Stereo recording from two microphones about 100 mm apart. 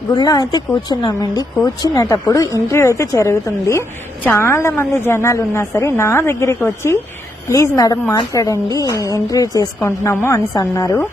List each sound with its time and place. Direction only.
0.1 s a woman's voice: 40° left (ahead or behind)